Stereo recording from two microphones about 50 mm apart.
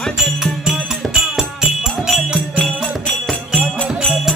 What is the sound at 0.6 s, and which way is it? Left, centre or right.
Music, centre.